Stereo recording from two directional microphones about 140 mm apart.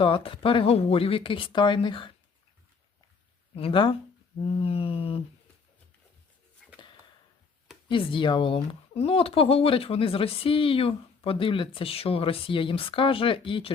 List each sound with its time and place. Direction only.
0.0 s speech: 40° left (ahead or behind)
3.5 s speech: 40° left (ahead or behind)
4.6 s mantra: 45° left (ahead or behind)
6.6 s a sound: 5° left (ahead or behind)
7.9 s speech: 35° left (ahead or behind)